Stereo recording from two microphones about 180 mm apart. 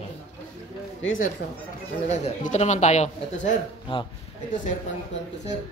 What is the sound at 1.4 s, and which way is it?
Speech, 60° left (ahead or behind).